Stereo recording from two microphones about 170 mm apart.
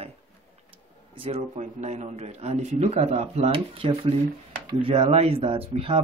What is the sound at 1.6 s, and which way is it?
Speech, 45° right (ahead or behind).